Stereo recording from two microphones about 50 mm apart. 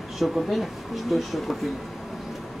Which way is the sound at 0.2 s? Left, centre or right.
Centre.